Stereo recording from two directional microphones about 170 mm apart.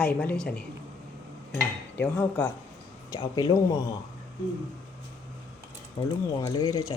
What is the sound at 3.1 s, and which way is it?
Speech, 25° left (ahead or behind).